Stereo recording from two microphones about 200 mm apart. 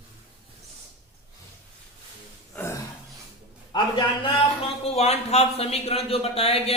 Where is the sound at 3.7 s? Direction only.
25° left (ahead or behind).